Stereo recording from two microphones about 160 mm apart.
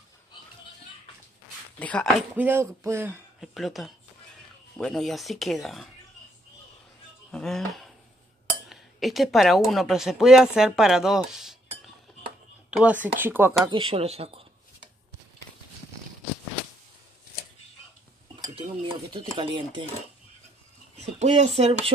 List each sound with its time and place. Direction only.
1.8 s speech: 10° left (ahead or behind)
2.3 s speech: 15° right (ahead or behind)
3.3 s speech: centre (ahead or behind)
7.2 s speech: 5° left (ahead or behind); by 13.6 s 15° right (ahead or behind)
13.7 s speech: 30° right (ahead or behind)
18.6 s stir: 35° right (ahead or behind)
19.3 s speech: 30° right (ahead or behind)
21.0 s speech: 45° right (ahead or behind)